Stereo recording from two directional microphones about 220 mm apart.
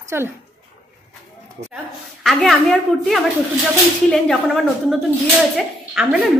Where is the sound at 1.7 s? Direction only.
Centre (ahead or behind).